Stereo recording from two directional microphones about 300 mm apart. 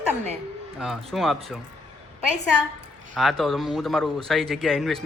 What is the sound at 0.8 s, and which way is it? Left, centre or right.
Speech, centre.